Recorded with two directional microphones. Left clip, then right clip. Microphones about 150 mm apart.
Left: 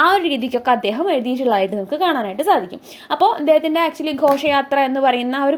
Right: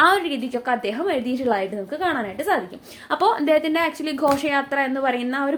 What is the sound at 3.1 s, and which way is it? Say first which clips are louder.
A woman's voice: left 4 dB; 15° left (ahead or behind).